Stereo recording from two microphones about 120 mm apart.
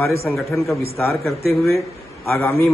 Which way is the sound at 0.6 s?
Centre (ahead or behind).